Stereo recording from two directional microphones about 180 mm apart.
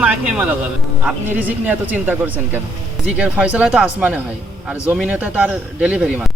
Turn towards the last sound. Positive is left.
turn(degrees=-5)  # may be behind; listen again after turning